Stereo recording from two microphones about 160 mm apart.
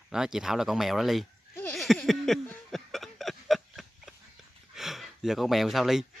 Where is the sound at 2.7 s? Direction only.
Centre (ahead or behind).